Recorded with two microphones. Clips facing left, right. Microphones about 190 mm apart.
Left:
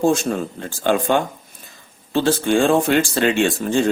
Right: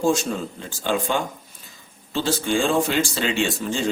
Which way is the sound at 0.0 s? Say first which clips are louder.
Left 4 dB; 60° left (ahead or behind).